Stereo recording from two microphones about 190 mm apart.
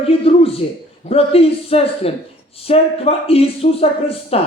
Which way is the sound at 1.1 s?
30° left (ahead or behind).